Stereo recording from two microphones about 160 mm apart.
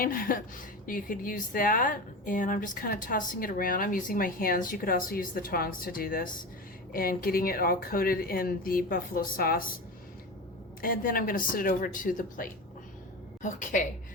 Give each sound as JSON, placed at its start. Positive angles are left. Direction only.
{"t": 0.0, "sound": "speech", "side_deg": 60}
{"t": 10.8, "sound": "a woman's voice", "side_deg": 65}